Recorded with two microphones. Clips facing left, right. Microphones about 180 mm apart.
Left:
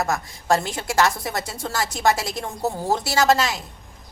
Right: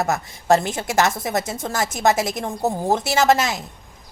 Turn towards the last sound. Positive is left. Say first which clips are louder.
# right 2 dB
turn(degrees=-20)  # may be behind; listen again after turning